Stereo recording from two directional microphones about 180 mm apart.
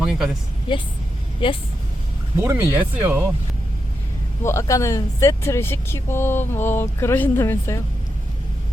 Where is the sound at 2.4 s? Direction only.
15° right (ahead or behind).